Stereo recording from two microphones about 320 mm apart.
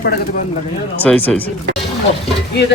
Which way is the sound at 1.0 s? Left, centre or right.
Centre.